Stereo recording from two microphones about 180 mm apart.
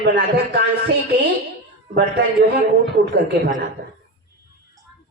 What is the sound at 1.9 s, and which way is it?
A woman's voice, 65° right (ahead or behind).